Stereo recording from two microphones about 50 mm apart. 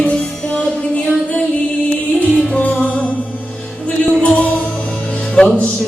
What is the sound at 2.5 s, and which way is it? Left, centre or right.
Music, left.